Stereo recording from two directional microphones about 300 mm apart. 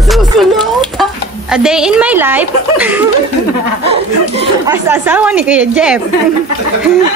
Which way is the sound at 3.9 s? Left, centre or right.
Centre.